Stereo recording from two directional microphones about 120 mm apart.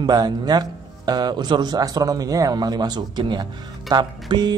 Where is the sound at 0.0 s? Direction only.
35° right (ahead or behind).